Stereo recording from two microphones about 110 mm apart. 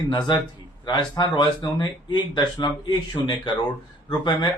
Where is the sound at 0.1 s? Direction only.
45° left (ahead or behind).